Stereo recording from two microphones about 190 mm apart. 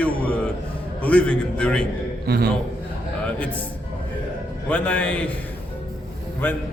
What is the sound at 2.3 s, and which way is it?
Speech, 55° right (ahead or behind).